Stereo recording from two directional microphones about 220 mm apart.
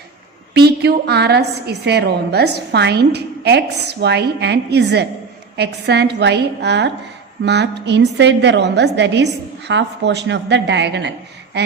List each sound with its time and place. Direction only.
0.5 s a woman's voice: 45° right (ahead or behind)